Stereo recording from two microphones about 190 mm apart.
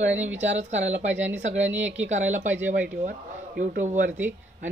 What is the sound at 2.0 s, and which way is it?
A man's voice, 40° right (ahead or behind).